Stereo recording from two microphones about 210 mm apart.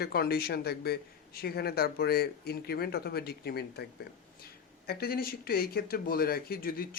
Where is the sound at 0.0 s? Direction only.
45° left (ahead or behind).